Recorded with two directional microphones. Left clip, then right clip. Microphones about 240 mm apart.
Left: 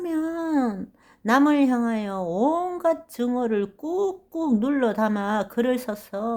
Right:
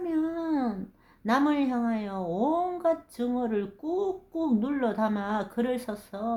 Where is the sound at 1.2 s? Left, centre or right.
Left.